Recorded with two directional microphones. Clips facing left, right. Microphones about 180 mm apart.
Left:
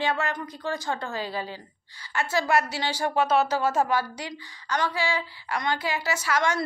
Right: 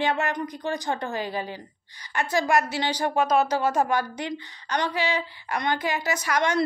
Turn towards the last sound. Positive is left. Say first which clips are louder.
# right 1 dB
turn(degrees=-20)  # may be behind; listen again after turning